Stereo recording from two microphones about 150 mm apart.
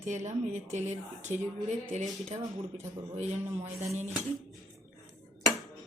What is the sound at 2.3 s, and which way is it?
Speech, 50° right (ahead or behind).